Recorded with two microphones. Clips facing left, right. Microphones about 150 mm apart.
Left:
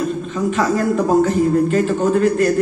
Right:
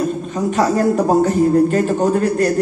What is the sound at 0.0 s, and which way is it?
Speech, 40° right (ahead or behind).